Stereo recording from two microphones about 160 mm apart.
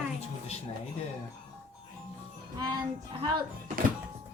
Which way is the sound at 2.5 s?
25° right (ahead or behind).